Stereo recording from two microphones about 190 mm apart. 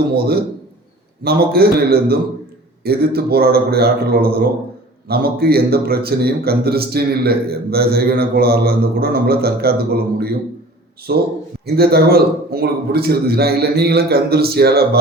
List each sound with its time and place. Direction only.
1.2 s a man's voice: 55° right (ahead or behind)